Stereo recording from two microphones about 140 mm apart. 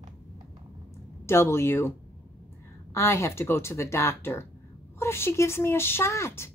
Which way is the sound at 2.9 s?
20° left (ahead or behind).